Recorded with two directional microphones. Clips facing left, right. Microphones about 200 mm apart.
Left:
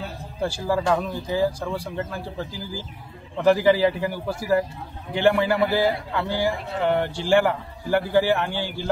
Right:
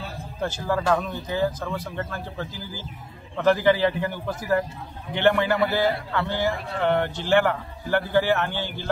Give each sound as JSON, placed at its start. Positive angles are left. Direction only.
{"t": 0.4, "sound": "a man's voice", "side_deg": 10}